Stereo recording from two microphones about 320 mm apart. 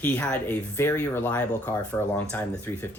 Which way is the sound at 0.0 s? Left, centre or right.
Centre.